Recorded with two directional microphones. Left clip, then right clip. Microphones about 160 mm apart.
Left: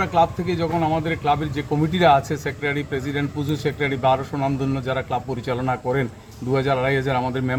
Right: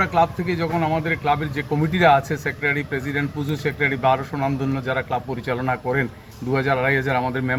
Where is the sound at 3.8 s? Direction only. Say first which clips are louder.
Right 1 dB; 30° left (ahead or behind).